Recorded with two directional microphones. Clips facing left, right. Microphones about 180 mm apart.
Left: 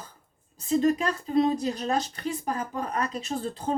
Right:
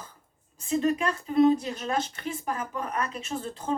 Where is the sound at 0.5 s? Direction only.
35° left (ahead or behind).